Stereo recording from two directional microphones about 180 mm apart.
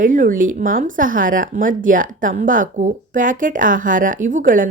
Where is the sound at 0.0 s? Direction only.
45° right (ahead or behind).